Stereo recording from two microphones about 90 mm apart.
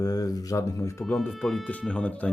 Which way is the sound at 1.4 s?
5° left (ahead or behind).